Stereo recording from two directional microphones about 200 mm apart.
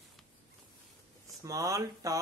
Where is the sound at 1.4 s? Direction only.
15° right (ahead or behind).